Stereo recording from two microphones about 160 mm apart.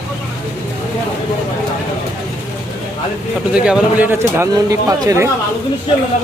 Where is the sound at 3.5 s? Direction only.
5° right (ahead or behind).